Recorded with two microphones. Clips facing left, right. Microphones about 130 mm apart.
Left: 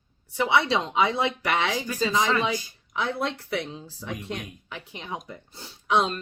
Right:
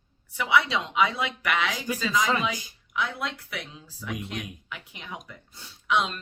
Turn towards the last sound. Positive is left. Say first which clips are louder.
# left 3 dB
turn(degrees=35)  # may be behind; listen again after turning